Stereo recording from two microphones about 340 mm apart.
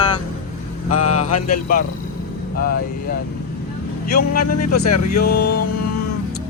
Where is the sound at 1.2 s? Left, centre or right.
Left.